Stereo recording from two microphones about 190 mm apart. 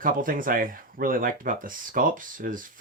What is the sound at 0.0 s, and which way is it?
Speech, 45° right (ahead or behind).